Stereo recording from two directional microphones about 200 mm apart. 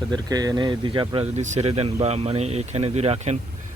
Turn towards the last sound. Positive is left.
turn(degrees=-30)  # may be behind; listen again after turning